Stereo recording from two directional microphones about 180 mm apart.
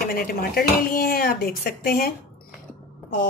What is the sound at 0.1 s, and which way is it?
Speech, 55° left (ahead or behind).